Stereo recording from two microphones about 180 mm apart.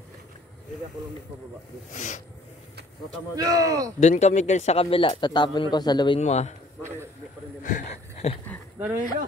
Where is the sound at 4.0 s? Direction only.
40° left (ahead or behind); by 6.2 s 25° left (ahead or behind).